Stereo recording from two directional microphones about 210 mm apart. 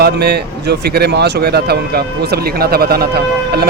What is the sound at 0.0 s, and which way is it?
Speech, 50° right (ahead or behind).